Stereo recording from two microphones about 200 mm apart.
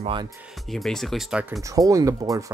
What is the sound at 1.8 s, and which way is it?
Speech, 15° right (ahead or behind).